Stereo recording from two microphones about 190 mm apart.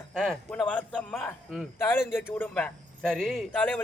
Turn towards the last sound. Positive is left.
turn(degrees=10)  # may be behind; listen again after turning